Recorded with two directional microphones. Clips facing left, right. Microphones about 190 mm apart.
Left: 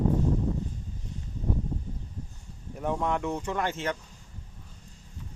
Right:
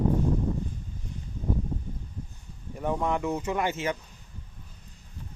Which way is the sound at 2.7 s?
Centre (ahead or behind).